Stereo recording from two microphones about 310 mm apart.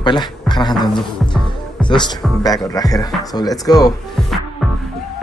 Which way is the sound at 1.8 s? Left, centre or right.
Centre.